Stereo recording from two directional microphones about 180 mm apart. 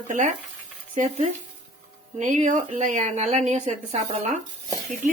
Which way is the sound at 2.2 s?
45° right (ahead or behind).